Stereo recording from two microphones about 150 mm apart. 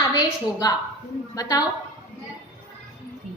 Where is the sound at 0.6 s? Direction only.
25° left (ahead or behind).